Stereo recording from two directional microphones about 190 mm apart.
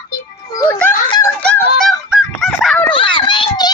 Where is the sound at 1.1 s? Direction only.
20° left (ahead or behind).